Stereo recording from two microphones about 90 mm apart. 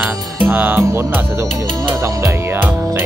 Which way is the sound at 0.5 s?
25° right (ahead or behind).